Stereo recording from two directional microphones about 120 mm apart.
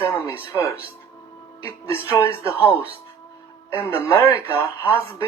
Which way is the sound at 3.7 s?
20° left (ahead or behind).